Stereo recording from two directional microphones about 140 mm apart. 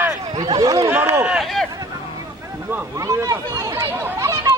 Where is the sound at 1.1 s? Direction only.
5° right (ahead or behind).